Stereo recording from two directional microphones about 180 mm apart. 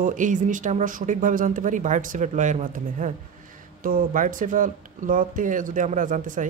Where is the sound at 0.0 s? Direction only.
45° right (ahead or behind).